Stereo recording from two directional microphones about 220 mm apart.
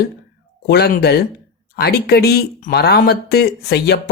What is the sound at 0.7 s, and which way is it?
Speech, 45° left (ahead or behind).